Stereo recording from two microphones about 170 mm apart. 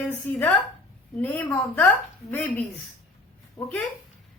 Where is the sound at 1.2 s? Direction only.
10° left (ahead or behind).